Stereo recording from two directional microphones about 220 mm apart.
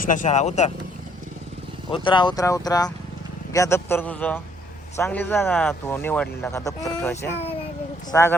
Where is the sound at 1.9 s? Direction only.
20° left (ahead or behind).